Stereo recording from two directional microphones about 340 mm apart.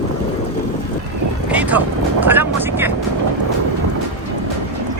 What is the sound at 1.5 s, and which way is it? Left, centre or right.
Speech, centre.